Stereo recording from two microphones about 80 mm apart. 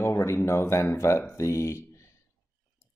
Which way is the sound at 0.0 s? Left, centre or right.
Left.